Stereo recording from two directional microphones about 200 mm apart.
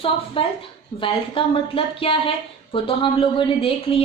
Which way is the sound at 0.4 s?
25° left (ahead or behind).